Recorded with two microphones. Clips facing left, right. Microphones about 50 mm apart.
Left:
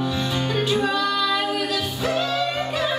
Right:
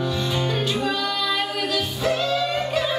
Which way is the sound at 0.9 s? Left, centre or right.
Left.